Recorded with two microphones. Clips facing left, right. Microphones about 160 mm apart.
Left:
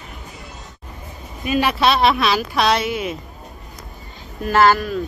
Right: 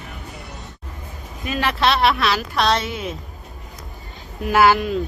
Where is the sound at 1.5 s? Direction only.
15° left (ahead or behind).